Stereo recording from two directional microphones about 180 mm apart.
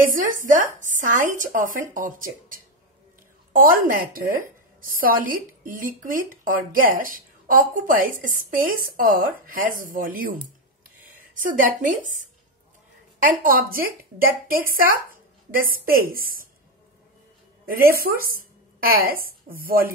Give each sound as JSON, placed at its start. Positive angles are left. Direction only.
{"t": 0.0, "sound": "speech", "side_deg": -50}
{"t": 11.3, "sound": "speech", "side_deg": -45}
{"t": 13.4, "sound": "speech", "side_deg": -55}
{"t": 17.6, "sound": "speech", "side_deg": -55}